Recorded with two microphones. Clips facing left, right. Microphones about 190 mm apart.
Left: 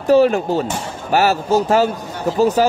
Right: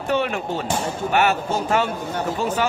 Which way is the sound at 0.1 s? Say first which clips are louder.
Left 10 dB; 35° left (ahead or behind).